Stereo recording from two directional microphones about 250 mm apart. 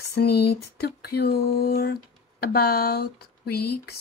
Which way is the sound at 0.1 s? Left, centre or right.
Left.